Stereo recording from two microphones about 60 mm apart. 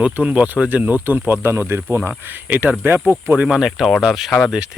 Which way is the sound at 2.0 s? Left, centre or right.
Right.